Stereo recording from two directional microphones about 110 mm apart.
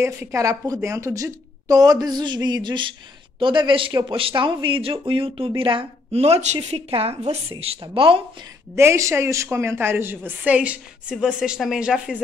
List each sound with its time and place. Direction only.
0.0 s a woman's voice: 25° right (ahead or behind); by 8.2 s 50° right (ahead or behind)
8.7 s a woman's voice: 25° right (ahead or behind); by 12.2 s 5° right (ahead or behind)